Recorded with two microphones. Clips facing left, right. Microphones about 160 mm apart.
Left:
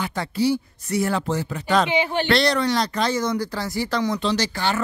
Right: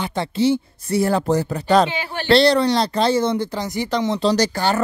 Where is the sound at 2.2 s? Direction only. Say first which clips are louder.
Right 10 dB; 30° right (ahead or behind).